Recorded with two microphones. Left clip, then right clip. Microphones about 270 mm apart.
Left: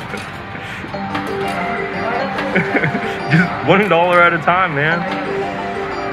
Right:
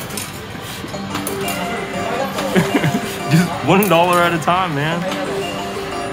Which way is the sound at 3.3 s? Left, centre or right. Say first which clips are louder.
Left 2 dB; right.